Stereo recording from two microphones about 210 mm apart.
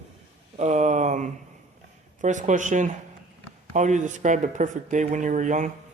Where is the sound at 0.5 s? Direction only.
35° right (ahead or behind).